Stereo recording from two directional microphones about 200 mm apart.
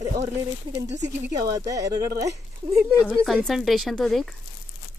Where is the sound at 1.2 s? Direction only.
15° right (ahead or behind).